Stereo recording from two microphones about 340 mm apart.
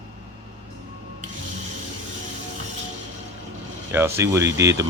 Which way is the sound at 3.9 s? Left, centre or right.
Centre.